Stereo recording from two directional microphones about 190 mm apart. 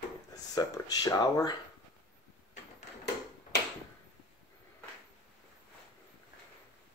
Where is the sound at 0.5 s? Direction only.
20° left (ahead or behind).